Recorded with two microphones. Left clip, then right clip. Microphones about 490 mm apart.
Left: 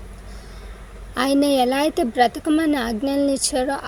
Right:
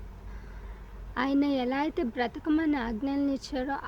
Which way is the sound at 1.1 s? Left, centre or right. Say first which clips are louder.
Left 10 dB; right.